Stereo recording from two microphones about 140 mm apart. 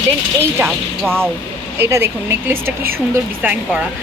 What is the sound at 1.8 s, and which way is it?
A woman's voice, 15° right (ahead or behind).